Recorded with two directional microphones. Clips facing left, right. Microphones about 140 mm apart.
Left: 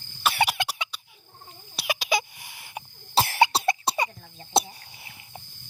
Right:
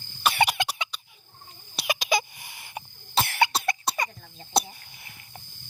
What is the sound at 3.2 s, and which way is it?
Cough, 35° left (ahead or behind).